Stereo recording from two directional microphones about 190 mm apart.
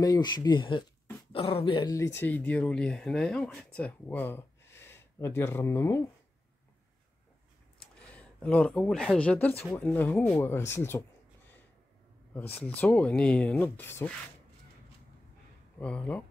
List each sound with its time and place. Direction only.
0.0 s speech: 20° left (ahead or behind)
7.8 s speech: 5° left (ahead or behind)
12.4 s speech: 10° left (ahead or behind)
15.8 s speech: 5° left (ahead or behind)